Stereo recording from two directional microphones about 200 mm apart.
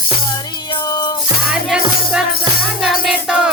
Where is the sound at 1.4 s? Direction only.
5° right (ahead or behind).